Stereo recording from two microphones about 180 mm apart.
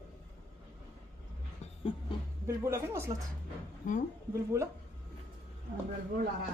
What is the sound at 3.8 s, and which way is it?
Speech, 45° left (ahead or behind).